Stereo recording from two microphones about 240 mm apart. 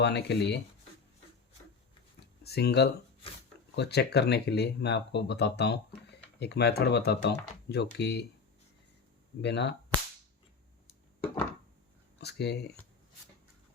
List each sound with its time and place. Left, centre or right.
0.0 s speech: left
2.4 s speech: left
9.4 s speech: left
12.2 s speech: left